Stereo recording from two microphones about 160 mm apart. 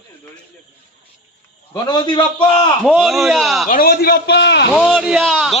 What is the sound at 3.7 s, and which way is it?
Speech, 65° left (ahead or behind).